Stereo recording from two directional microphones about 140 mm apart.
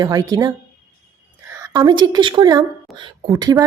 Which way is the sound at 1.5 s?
25° right (ahead or behind).